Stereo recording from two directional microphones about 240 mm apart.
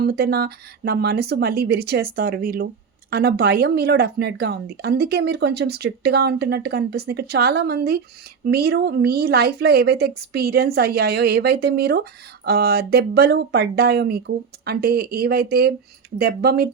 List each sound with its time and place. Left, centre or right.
0.0 s speech: right